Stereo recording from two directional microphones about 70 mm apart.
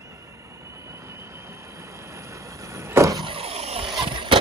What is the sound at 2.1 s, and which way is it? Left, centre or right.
Vehicle, right.